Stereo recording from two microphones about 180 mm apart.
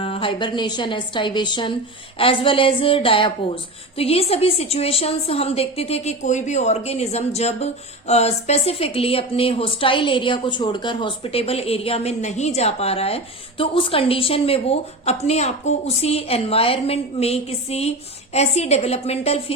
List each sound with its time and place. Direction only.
0.0 s a woman's voice: 30° left (ahead or behind)